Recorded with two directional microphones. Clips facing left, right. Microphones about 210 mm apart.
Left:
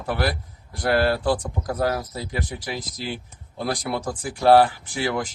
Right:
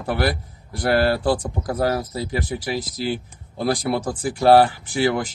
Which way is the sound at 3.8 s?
30° right (ahead or behind).